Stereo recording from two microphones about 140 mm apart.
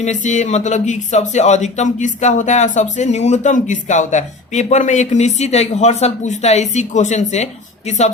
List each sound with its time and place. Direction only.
0.0 s speech: 60° left (ahead or behind)